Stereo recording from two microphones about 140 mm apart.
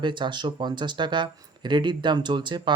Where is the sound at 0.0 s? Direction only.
35° right (ahead or behind).